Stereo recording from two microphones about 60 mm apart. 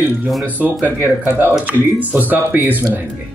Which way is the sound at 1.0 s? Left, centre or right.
Right.